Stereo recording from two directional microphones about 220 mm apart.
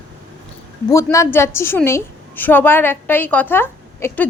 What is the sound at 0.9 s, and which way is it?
A woman's voice, 15° left (ahead or behind).